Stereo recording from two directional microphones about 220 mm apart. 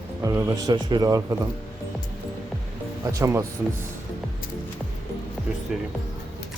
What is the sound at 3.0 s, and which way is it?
Speech, 15° right (ahead or behind).